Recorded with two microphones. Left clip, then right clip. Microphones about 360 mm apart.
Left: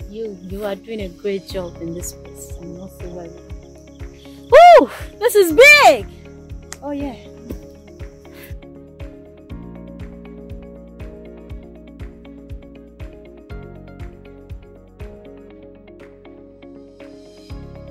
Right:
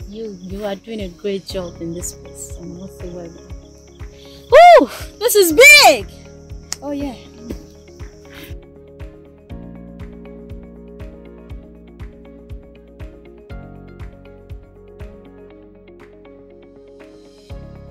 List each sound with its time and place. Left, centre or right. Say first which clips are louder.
0.1 s speech: left 1 dB; centre
4.5 s speech: even; centre
9.5 s music: right 1 dB; centre